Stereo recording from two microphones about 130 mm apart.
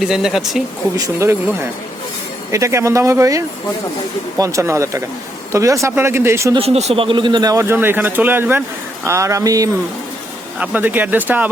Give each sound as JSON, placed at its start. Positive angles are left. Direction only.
{"t": 0.0, "sound": "speech", "side_deg": -5}
{"t": 0.9, "sound": "speech", "side_deg": -25}
{"t": 6.6, "sound": "speech", "side_deg": -55}
{"t": 10.6, "sound": "speech", "side_deg": -10}